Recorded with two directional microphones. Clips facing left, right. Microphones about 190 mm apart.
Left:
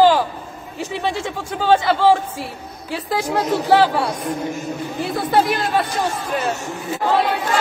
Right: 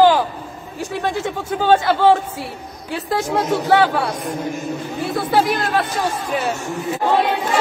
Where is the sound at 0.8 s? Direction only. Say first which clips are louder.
Right 1 dB; 5° right (ahead or behind).